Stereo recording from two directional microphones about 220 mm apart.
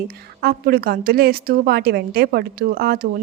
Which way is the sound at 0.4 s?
45° right (ahead or behind).